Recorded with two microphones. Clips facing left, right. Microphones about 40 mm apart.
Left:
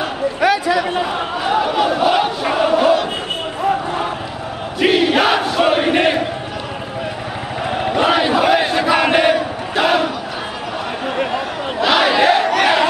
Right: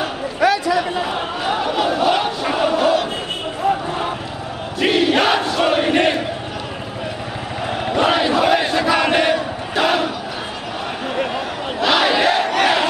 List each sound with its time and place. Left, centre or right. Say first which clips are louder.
0.4 s a sound: even; left
1.1 s a sound: left 3 dB; centre
3.6 s basketball bounce: left 1 dB; centre
4.7 s battle cry: left 2 dB; centre
7.7 s battle cry: left 2 dB; centre
11.1 s battle cry: left 1 dB; centre